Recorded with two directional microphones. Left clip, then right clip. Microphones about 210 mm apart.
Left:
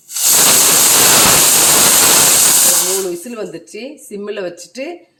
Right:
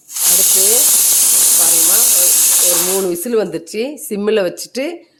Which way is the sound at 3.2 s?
55° right (ahead or behind).